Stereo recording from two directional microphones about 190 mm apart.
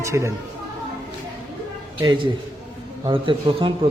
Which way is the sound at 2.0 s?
25° right (ahead or behind).